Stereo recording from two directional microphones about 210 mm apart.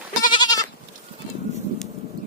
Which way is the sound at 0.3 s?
20° left (ahead or behind).